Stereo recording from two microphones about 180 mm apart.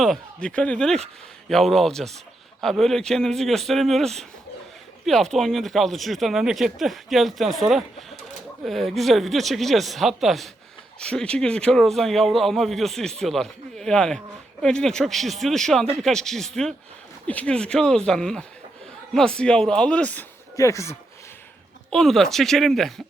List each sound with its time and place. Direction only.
0.0 s speech: 5° left (ahead or behind)
21.8 s speech: centre (ahead or behind)